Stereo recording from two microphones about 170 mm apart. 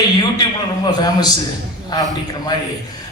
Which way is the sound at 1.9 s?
20° left (ahead or behind).